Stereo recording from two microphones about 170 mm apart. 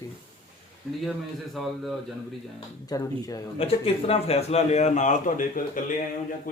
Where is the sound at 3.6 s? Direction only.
35° left (ahead or behind).